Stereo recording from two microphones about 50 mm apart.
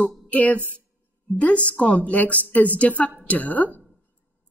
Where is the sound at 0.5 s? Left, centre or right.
Right.